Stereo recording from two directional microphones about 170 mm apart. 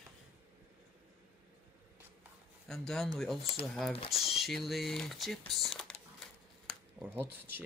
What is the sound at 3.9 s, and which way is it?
Speech, 35° left (ahead or behind).